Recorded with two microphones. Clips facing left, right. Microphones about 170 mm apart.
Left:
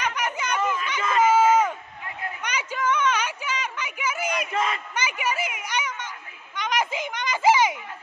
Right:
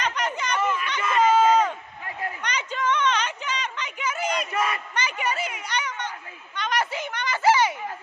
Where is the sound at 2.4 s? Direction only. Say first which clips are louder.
Left 1 dB; 10° left (ahead or behind).